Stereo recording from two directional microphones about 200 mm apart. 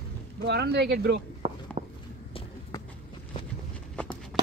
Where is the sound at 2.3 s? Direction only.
30° left (ahead or behind).